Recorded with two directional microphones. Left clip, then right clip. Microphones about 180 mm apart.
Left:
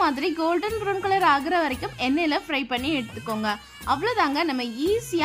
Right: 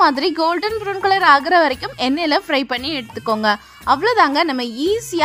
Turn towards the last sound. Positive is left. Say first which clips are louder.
# right 5 dB
turn(degrees=-30)  # may be behind; listen again after turning